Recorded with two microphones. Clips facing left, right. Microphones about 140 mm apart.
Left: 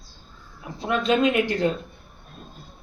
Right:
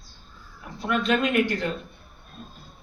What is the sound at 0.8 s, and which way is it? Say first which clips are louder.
Speech: left 2 dB; 25° left (ahead or behind).